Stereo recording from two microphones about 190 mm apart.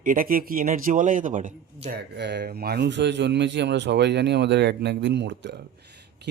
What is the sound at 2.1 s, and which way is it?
Speech, 60° right (ahead or behind).